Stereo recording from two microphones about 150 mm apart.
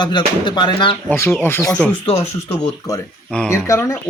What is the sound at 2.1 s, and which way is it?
Speech, 20° left (ahead or behind).